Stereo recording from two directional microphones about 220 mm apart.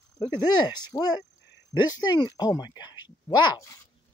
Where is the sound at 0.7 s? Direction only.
20° left (ahead or behind).